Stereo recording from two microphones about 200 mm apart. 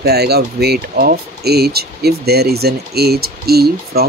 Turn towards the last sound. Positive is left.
turn(degrees=-50)  # may be behind; listen again after turning